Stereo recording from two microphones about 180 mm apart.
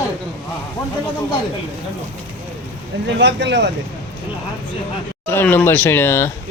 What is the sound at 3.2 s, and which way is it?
Speech, 70° right (ahead or behind).